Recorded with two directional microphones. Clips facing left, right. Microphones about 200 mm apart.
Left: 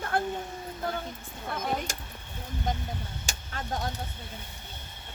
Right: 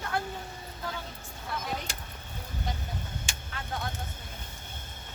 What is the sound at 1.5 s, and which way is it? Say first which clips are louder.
Speech: left 4 dB; 50° left (ahead or behind).